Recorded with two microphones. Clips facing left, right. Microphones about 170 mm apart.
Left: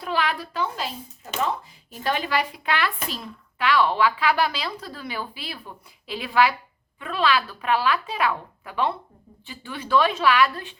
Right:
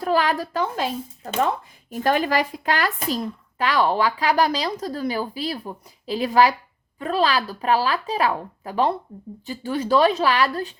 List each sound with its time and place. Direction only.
0.0 s speech: 45° right (ahead or behind)